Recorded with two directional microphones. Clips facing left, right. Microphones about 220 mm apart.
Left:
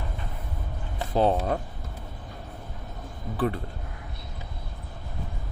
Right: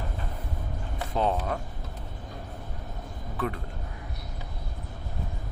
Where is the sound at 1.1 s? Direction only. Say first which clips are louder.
Left 5 dB; 35° left (ahead or behind).